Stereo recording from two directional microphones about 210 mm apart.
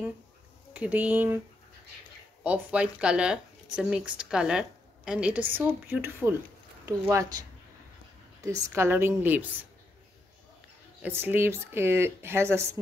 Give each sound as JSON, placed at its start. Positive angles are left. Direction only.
{"t": 0.7, "sound": "speech", "side_deg": -5}
{"t": 2.4, "sound": "a woman's voice", "side_deg": -5}
{"t": 8.6, "sound": "speech", "side_deg": -10}
{"t": 11.0, "sound": "speech", "side_deg": -10}